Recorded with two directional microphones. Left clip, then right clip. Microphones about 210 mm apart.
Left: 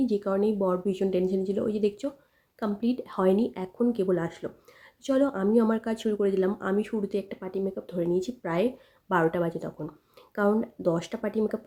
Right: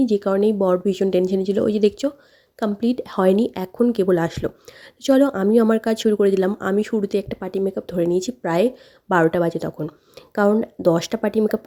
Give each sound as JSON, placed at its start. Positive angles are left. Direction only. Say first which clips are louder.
{"t": 0.0, "sound": "speech", "louder": "right 8 dB", "side_deg": -35}